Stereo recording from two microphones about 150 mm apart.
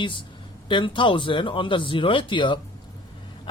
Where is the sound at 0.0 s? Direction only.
35° left (ahead or behind).